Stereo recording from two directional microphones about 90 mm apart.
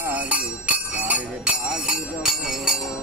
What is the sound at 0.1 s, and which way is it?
Music, 15° right (ahead or behind).